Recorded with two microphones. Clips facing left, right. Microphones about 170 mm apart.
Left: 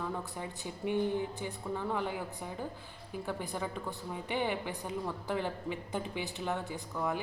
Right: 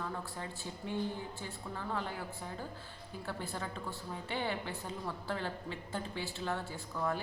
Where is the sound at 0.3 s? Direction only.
15° left (ahead or behind).